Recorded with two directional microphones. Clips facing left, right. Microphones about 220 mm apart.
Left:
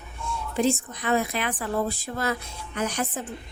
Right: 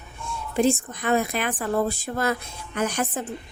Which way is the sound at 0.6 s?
50° right (ahead or behind).